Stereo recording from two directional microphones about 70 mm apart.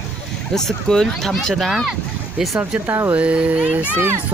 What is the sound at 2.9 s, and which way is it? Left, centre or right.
Speech, right.